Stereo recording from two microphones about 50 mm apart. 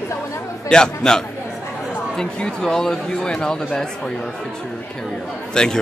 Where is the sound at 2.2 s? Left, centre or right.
Centre.